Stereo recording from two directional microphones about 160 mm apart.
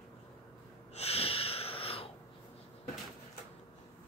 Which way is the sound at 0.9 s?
40° left (ahead or behind).